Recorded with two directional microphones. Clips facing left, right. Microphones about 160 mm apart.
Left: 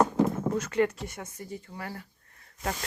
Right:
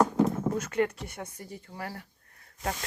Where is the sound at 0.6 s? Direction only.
50° right (ahead or behind).